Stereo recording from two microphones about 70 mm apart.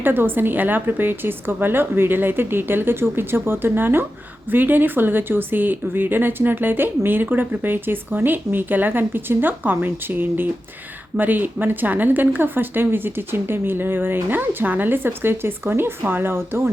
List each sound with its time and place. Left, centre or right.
0.0 s a woman's voice: right